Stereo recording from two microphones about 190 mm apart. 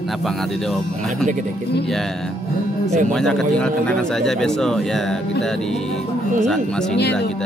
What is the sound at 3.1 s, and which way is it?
A man's voice, 5° left (ahead or behind).